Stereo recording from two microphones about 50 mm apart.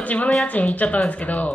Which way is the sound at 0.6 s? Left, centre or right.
Left.